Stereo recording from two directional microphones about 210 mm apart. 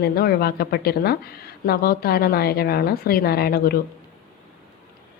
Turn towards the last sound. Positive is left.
turn(degrees=45)  # may be behind; listen again after turning